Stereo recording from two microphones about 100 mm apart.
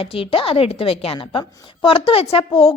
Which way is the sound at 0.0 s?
65° left (ahead or behind).